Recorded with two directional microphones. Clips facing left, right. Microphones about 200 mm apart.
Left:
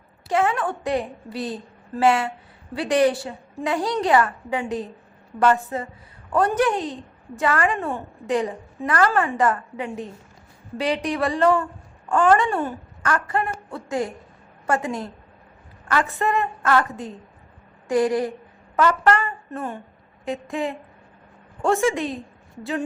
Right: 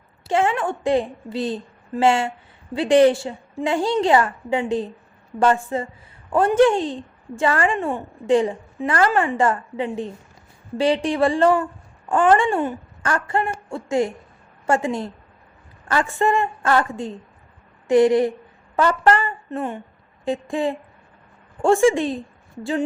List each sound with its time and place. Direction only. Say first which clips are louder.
0.3 s a woman's voice: right 1 dB; 25° right (ahead or behind)
12.5 s speech: right 3 dB; 15° right (ahead or behind)
13.0 s a woman's voice: right 1 dB; 30° right (ahead or behind)